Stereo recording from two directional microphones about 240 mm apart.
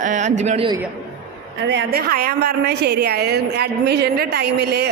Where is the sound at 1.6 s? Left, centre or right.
Right.